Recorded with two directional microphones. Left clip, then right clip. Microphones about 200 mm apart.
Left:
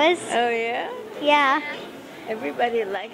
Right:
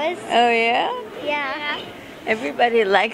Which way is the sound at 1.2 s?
90° left.